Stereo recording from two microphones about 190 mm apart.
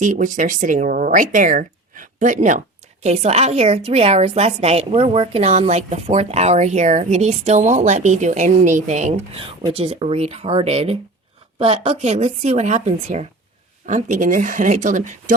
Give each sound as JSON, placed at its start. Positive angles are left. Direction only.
{"t": 0.0, "sound": "a woman's voice", "side_deg": -40}